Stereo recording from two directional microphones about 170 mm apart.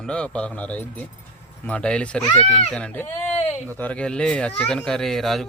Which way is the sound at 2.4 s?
40° left (ahead or behind).